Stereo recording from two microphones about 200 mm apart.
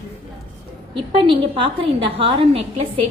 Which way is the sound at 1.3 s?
25° right (ahead or behind).